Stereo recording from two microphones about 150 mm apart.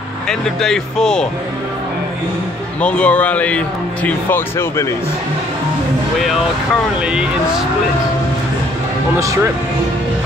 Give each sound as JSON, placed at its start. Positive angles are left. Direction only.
{"t": 0.3, "sound": "speech", "side_deg": 5}
{"t": 2.8, "sound": "a man's voice", "side_deg": 10}
{"t": 7.1, "sound": "speech", "side_deg": -5}
{"t": 9.2, "sound": "speech", "side_deg": -20}